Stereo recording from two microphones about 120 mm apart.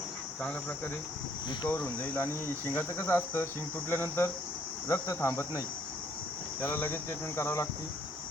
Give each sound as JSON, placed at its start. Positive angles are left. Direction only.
{"t": 1.6, "sound": "cricket", "side_deg": 15}